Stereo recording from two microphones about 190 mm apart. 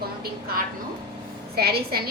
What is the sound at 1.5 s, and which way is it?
Speech, 55° right (ahead or behind).